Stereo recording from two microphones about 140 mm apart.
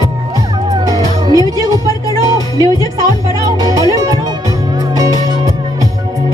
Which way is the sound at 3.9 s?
25° right (ahead or behind).